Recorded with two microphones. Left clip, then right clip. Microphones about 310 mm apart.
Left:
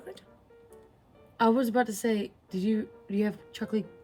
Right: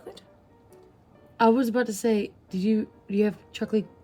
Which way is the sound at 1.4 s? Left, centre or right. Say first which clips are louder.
Right 3 dB; centre.